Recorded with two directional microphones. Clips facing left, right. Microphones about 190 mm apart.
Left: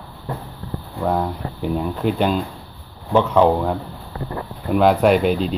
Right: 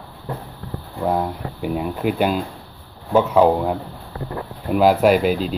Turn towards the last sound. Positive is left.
turn(degrees=0)  # may be behind; listen again after turning